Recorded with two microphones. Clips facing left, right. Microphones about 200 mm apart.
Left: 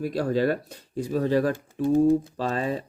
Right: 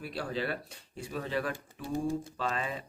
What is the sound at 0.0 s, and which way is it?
Speech, 40° left (ahead or behind).